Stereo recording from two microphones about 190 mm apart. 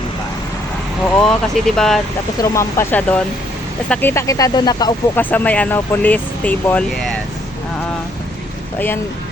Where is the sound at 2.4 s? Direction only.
15° left (ahead or behind).